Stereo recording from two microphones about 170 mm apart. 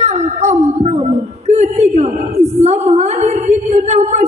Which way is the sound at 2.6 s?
40° right (ahead or behind).